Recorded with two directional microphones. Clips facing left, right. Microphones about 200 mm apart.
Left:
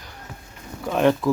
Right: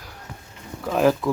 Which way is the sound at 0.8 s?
Centre (ahead or behind).